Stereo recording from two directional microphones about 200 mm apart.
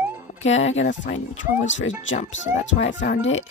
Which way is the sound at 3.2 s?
70° left (ahead or behind).